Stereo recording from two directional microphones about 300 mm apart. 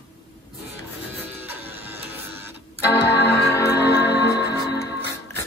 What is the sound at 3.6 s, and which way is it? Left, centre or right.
Music, left.